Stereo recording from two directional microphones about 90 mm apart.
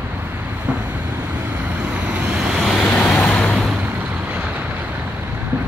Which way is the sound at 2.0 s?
10° right (ahead or behind).